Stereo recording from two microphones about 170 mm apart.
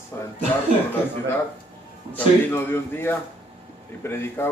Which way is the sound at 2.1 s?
15° left (ahead or behind).